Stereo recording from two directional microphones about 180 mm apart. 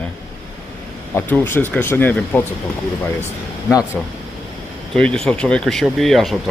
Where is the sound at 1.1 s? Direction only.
10° left (ahead or behind).